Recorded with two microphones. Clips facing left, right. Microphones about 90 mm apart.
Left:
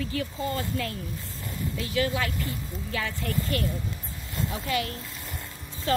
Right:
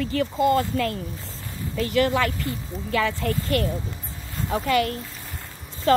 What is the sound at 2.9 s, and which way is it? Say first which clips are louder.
Speech: right 8 dB; 90° right.